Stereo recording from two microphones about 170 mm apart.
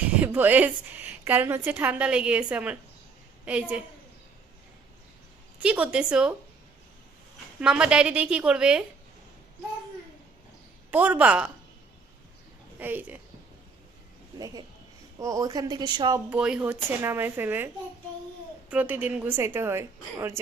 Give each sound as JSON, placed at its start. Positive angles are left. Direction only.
{"t": 0.1, "sound": "a woman's voice", "side_deg": -10}
{"t": 5.5, "sound": "a woman's voice", "side_deg": -10}
{"t": 7.6, "sound": "a woman's voice", "side_deg": -5}
{"t": 10.9, "sound": "a woman's voice", "side_deg": -10}
{"t": 12.8, "sound": "a woman's voice", "side_deg": -10}
{"t": 14.3, "sound": "speech", "side_deg": -20}
{"t": 16.1, "sound": "a woman's voice", "side_deg": -5}
{"t": 18.7, "sound": "a woman's voice", "side_deg": -10}